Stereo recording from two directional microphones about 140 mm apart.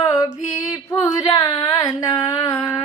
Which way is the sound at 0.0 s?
25° left (ahead or behind).